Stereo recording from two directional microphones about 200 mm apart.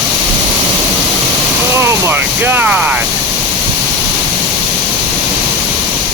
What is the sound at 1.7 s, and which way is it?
Speech, 15° right (ahead or behind).